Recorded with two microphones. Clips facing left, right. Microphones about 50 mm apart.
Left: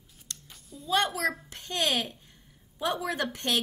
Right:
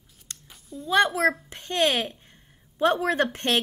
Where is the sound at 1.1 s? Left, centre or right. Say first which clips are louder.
Right 7 dB; right.